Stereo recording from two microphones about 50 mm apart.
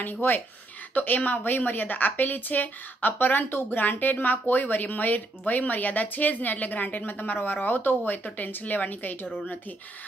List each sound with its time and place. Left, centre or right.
0.0 s speech: left
3.4 s speech: left
3.9 s speech: left